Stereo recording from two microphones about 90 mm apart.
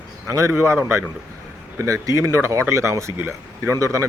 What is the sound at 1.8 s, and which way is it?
Speech, 35° right (ahead or behind).